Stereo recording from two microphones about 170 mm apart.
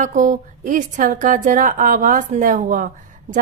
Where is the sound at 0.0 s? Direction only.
50° right (ahead or behind).